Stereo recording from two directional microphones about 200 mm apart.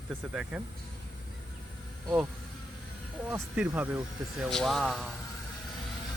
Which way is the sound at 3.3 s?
10° right (ahead or behind).